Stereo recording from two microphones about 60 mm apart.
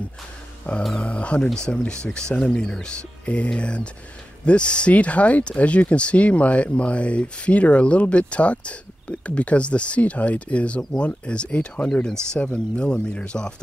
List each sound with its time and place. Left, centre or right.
0.7 s speech: left